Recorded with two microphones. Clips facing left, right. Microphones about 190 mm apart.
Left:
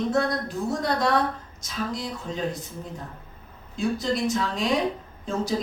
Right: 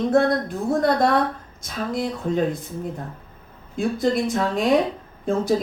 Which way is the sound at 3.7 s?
55° right (ahead or behind).